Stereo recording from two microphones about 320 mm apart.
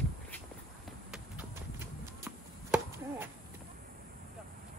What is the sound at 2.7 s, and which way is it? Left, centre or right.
Chop, centre.